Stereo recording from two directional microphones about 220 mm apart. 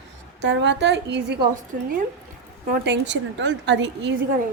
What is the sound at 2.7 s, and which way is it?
A woman's voice, 50° right (ahead or behind).